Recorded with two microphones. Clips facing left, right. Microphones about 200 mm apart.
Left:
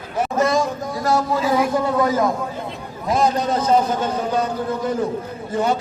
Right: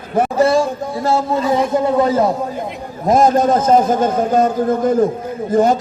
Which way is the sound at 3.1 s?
45° right (ahead or behind).